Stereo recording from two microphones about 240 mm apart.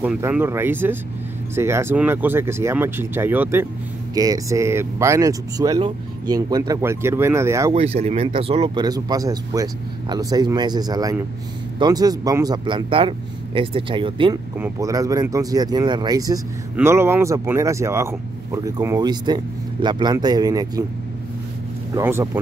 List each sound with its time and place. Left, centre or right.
0.0 s speech: centre
7.7 s speech: right
21.9 s speech: centre